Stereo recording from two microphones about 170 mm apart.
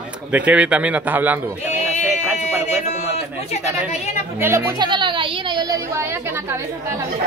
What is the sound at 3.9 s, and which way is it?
Speech, 40° left (ahead or behind).